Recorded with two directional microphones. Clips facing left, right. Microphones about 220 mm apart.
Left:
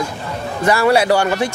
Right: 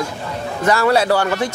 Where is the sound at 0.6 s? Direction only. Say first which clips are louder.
Left 1 dB; 10° left (ahead or behind).